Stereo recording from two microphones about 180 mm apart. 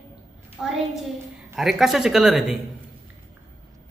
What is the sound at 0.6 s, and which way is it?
Speech, 5° right (ahead or behind).